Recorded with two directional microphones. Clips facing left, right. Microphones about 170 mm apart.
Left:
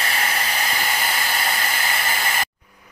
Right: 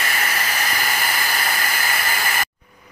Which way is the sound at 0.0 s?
30° left (ahead or behind).